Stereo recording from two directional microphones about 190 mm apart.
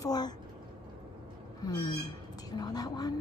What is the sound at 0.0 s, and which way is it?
Speech, 20° left (ahead or behind).